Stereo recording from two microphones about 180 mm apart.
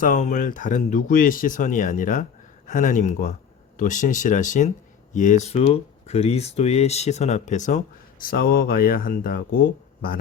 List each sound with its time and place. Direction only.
0.0 s speech: 45° left (ahead or behind)
8.2 s speech: 55° left (ahead or behind)